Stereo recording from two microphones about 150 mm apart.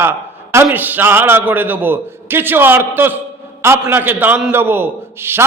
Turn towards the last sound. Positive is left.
turn(degrees=-15)  # may be behind; listen again after turning